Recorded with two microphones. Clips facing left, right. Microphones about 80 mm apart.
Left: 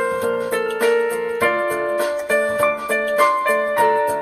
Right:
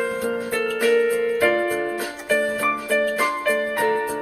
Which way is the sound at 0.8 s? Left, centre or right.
Centre.